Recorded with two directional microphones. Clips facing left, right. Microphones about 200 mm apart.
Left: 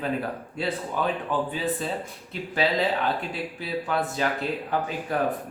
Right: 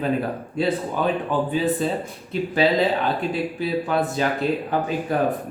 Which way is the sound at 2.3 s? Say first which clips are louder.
Right 6 dB; 20° right (ahead or behind).